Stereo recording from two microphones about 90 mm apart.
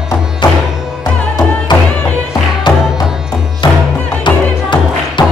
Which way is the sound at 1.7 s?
55° left (ahead or behind).